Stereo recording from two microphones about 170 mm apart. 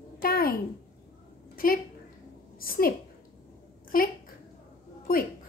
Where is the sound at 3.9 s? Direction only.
55° left (ahead or behind).